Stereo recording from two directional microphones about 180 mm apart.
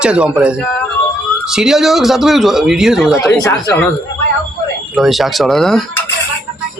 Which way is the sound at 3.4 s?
15° left (ahead or behind).